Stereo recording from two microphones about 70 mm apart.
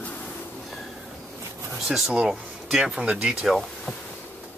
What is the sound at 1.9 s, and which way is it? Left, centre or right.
Speech, centre.